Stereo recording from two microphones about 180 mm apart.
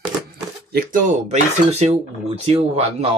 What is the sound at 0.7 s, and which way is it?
Speech, 55° right (ahead or behind).